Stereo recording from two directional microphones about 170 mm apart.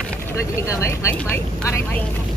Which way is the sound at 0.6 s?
15° left (ahead or behind).